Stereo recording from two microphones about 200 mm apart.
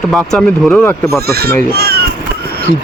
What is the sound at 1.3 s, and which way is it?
Speech, 50° right (ahead or behind).